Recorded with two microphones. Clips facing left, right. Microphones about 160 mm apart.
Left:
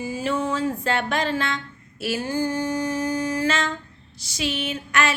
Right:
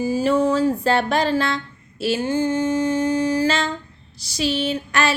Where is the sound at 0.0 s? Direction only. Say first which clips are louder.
Right 7 dB; 35° right (ahead or behind).